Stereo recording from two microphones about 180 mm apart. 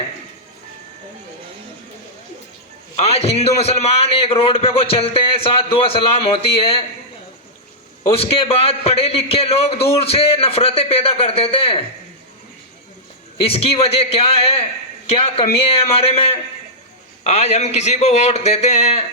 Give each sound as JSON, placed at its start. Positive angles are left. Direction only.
{"t": 2.9, "sound": "a man's voice", "side_deg": 35}
{"t": 8.0, "sound": "a man's voice", "side_deg": 30}
{"t": 13.4, "sound": "a man's voice", "side_deg": 30}